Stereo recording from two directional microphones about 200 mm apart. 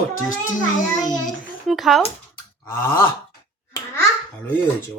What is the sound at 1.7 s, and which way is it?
Speech, centre (ahead or behind).